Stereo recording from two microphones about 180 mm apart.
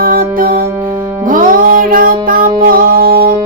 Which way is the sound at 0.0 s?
50° right (ahead or behind).